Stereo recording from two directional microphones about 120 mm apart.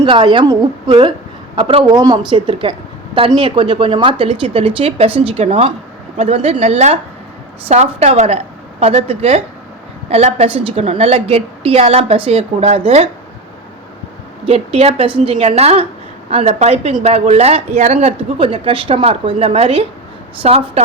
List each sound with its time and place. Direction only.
0.0 s a man's voice: 40° right (ahead or behind); by 13.1 s 60° right (ahead or behind)
14.4 s speech: 55° right (ahead or behind)